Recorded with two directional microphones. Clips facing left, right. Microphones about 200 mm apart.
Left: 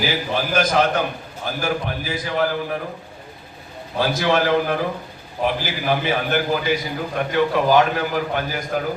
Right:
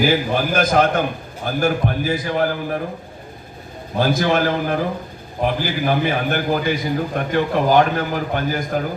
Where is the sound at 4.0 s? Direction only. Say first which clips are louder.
Right 2 dB; 50° right (ahead or behind).